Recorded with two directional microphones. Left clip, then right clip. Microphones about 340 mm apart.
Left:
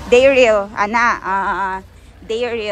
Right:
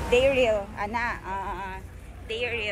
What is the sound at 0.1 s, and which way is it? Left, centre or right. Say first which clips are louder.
Speech: left 11 dB; left.